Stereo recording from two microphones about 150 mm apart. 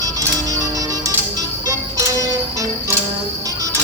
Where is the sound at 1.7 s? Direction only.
20° right (ahead or behind).